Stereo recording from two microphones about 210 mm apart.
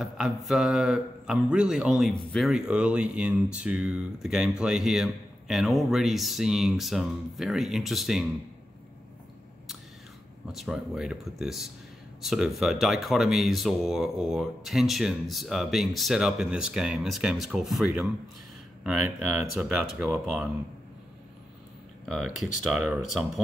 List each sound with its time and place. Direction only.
0.0 s speech: centre (ahead or behind)
10.4 s speech: centre (ahead or behind)
22.0 s speech: centre (ahead or behind)